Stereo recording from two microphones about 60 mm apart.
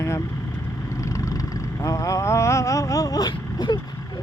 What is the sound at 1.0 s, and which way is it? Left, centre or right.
Vehicle, left.